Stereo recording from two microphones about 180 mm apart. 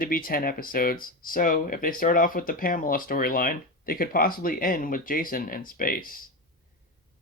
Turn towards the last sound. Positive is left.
turn(degrees=50)  # may be behind; listen again after turning